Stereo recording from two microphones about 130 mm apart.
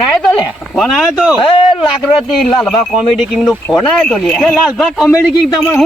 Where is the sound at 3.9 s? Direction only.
5° left (ahead or behind).